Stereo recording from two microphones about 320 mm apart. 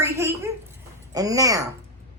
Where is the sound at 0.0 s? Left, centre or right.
Centre.